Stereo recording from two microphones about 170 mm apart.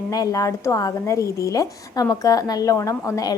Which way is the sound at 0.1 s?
20° left (ahead or behind).